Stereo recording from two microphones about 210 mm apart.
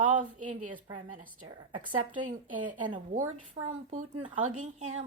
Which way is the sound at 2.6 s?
35° right (ahead or behind).